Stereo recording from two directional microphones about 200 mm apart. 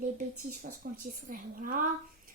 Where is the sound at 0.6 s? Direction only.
45° right (ahead or behind).